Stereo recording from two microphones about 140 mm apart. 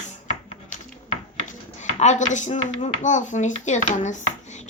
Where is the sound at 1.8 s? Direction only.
55° left (ahead or behind).